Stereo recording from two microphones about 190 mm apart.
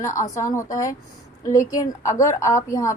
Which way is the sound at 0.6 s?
15° left (ahead or behind).